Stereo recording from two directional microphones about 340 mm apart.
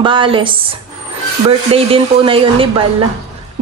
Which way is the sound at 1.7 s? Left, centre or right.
Centre.